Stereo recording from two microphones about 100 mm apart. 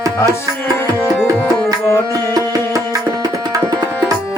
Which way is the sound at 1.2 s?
35° right (ahead or behind).